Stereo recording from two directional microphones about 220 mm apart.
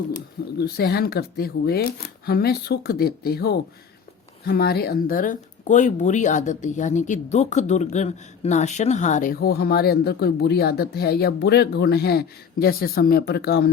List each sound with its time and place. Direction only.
0.6 s speech: 45° left (ahead or behind)